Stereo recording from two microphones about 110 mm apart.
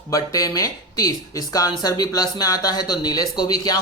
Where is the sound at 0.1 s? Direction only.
30° left (ahead or behind).